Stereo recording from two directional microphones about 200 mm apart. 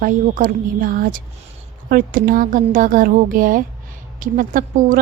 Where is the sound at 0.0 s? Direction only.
40° right (ahead or behind).